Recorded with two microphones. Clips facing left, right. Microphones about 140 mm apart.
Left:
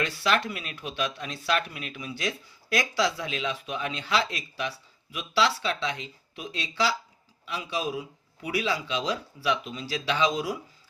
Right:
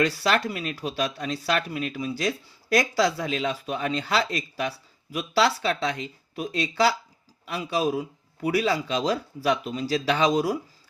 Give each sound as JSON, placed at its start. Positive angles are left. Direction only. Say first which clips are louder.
{"t": 0.0, "sound": "speech", "louder": "right 3 dB", "side_deg": -40}